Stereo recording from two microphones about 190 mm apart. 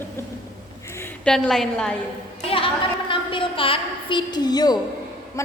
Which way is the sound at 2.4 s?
30° left (ahead or behind).